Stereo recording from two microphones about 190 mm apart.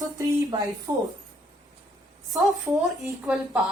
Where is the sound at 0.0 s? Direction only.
20° right (ahead or behind).